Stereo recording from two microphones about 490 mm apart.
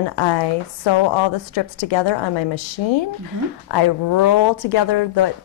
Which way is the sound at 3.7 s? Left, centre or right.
Left.